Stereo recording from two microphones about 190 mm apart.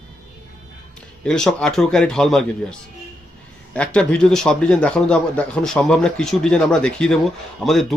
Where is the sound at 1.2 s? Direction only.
5° left (ahead or behind).